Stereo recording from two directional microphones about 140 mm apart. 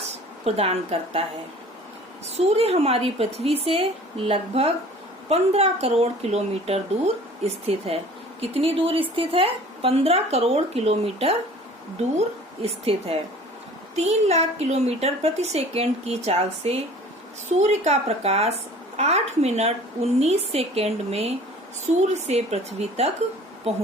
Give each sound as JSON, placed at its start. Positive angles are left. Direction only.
{"t": 0.1, "sound": "a woman's voice", "side_deg": -50}
{"t": 2.3, "sound": "speech", "side_deg": -45}
{"t": 12.6, "sound": "speech", "side_deg": -45}